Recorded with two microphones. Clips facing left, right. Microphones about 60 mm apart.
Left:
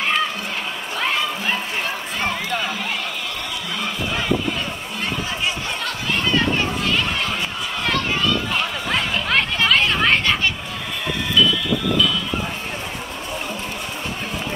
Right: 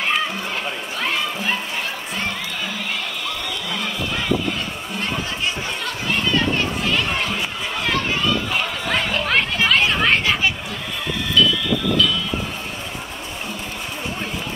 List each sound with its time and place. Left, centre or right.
8.8 s chatter: centre